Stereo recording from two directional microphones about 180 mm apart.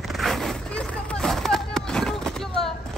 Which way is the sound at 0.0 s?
Centre (ahead or behind).